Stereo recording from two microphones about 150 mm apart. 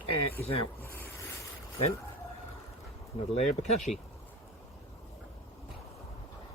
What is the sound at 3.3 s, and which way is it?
Speech, 45° left (ahead or behind).